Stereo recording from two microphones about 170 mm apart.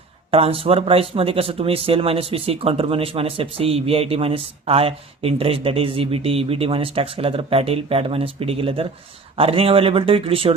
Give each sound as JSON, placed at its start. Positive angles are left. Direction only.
{"t": 0.3, "sound": "speech", "side_deg": -35}